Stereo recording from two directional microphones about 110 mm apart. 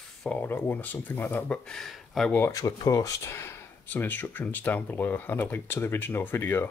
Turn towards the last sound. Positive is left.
turn(degrees=20)  # may be behind; listen again after turning